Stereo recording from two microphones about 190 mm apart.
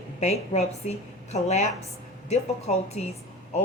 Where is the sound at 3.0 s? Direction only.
35° left (ahead or behind).